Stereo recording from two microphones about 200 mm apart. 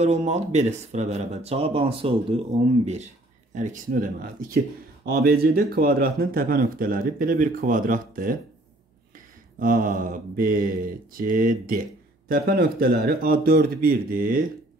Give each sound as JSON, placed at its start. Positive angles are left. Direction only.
{"t": 0.0, "sound": "speech", "side_deg": -35}
{"t": 9.6, "sound": "speech", "side_deg": -45}